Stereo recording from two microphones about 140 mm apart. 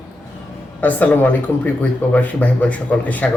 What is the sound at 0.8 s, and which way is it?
A man's voice, 10° left (ahead or behind).